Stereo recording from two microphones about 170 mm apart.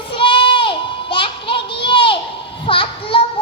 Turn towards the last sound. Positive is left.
turn(degrees=30)  # may be behind; listen again after turning